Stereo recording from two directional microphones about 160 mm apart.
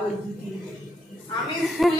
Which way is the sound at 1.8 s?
Centre (ahead or behind).